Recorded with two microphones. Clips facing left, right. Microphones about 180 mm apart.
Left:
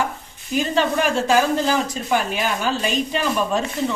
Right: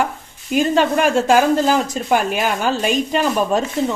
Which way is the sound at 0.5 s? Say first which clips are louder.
Right 4 dB; 50° right (ahead or behind).